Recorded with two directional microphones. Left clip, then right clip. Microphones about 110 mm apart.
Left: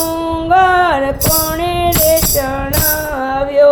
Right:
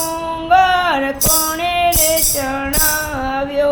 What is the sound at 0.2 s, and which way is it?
Female singing, 40° left (ahead or behind).